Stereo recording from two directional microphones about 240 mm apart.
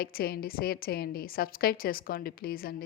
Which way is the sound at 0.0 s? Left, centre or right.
Left.